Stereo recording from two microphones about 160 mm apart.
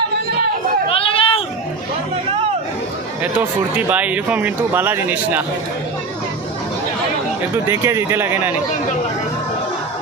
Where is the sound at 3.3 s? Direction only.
10° right (ahead or behind).